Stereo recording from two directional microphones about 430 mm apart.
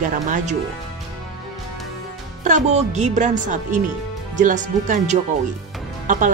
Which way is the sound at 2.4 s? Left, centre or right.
Centre.